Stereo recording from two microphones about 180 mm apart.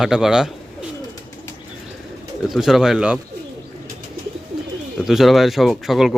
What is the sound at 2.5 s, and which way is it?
Speech, centre (ahead or behind).